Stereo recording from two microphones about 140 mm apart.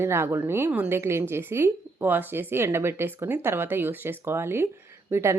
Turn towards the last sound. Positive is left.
turn(degrees=-20)  # may be behind; listen again after turning